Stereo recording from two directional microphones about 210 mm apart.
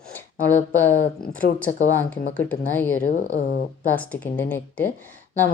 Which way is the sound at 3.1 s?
40° left (ahead or behind).